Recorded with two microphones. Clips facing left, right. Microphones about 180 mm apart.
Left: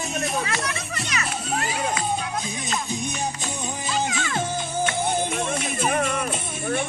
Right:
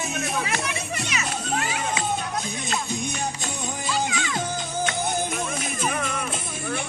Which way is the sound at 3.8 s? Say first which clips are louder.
Even; 50° left (ahead or behind).